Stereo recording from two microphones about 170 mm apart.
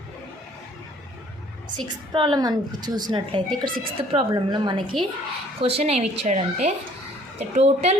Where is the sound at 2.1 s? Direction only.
25° right (ahead or behind).